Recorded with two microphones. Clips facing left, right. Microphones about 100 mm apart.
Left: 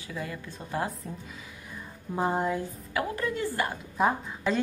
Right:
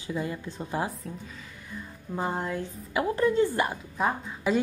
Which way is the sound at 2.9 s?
25° right (ahead or behind).